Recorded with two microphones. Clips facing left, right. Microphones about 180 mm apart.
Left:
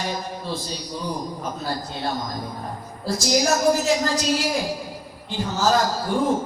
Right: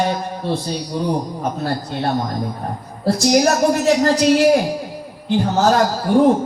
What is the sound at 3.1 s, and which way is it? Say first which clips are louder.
A man's voice: right 6 dB; 65° right (ahead or behind).